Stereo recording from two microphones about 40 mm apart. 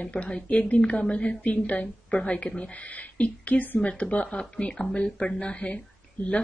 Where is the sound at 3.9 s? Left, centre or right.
Left.